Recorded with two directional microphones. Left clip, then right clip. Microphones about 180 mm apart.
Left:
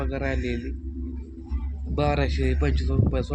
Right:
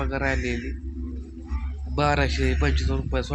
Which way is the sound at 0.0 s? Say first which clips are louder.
Right 3 dB; centre (ahead or behind).